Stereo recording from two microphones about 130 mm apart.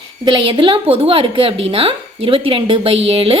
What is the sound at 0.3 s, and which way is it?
A woman's voice, 40° right (ahead or behind).